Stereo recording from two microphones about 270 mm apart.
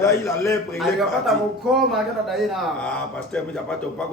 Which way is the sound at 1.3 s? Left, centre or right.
Centre.